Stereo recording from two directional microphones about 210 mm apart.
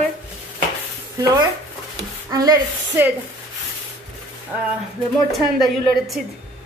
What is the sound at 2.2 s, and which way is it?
Speech, 15° right (ahead or behind).